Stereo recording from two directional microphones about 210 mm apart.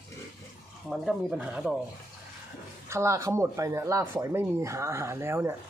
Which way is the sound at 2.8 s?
15° right (ahead or behind).